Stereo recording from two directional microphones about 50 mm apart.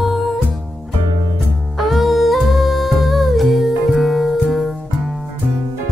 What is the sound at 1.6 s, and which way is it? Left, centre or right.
Music, centre.